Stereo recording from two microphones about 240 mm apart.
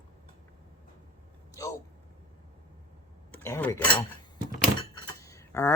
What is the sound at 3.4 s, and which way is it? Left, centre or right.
Speech, centre.